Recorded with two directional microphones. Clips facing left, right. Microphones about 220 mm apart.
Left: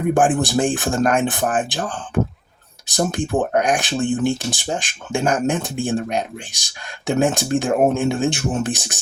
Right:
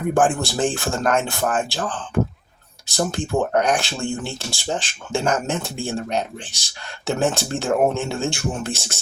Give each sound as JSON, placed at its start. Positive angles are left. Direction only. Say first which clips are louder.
{"t": 0.1, "sound": "speech", "louder": "left 2 dB", "side_deg": 15}